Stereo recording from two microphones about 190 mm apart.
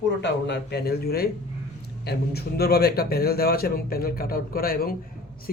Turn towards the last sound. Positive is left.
turn(degrees=50)  # may be behind; listen again after turning